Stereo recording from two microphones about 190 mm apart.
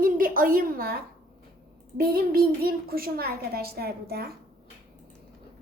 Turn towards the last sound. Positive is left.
turn(degrees=-55)  # may be behind; listen again after turning